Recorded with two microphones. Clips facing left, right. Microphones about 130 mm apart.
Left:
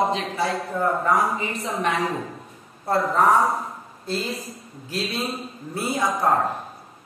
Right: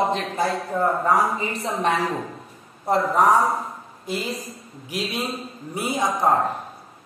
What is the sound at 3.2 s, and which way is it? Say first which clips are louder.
Speech: even; 15° right (ahead or behind).